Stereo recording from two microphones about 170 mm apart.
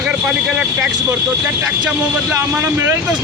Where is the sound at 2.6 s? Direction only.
15° right (ahead or behind).